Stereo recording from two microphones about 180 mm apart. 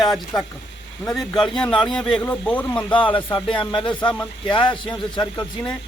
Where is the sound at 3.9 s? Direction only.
5° left (ahead or behind).